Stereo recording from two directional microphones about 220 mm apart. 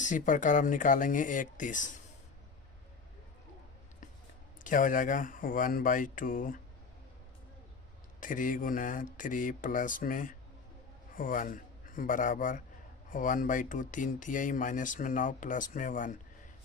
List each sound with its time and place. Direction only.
0.0 s speech: 35° left (ahead or behind)
4.6 s speech: 35° left (ahead or behind)
8.2 s a man's voice: 35° left (ahead or behind)